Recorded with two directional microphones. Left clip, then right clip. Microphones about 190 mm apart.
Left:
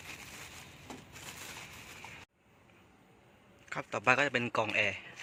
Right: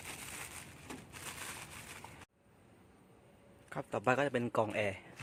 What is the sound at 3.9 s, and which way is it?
A man's voice, 20° right (ahead or behind).